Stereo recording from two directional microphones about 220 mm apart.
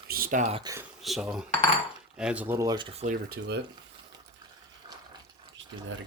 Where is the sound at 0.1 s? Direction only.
40° right (ahead or behind).